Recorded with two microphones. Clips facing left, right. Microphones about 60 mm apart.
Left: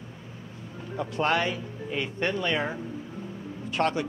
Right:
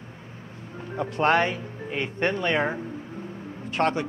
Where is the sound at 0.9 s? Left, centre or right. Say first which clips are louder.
Right 4 dB; right.